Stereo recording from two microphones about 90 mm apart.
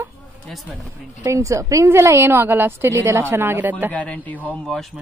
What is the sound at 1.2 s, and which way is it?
A woman's voice, 35° right (ahead or behind).